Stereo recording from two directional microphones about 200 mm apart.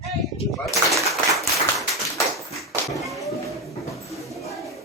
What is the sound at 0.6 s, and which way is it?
Speech, centre (ahead or behind).